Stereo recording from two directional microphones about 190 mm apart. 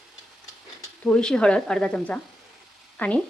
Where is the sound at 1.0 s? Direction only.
5° left (ahead or behind).